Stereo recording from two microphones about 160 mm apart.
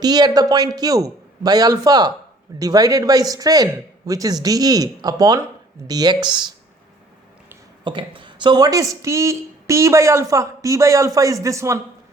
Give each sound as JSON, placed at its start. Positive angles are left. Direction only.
{"t": 0.0, "sound": "speech", "side_deg": -25}
{"t": 7.9, "sound": "speech", "side_deg": -30}